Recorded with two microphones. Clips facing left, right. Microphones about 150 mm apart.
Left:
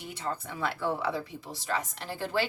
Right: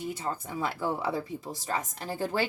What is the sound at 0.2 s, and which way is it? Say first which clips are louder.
Speech: right 1 dB; 40° right (ahead or behind).